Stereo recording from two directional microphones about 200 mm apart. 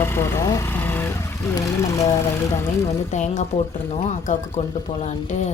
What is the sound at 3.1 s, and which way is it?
A woman's voice, 35° left (ahead or behind).